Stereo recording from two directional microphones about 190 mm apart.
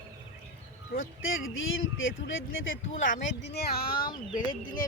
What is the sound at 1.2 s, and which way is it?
Speech, 90° left.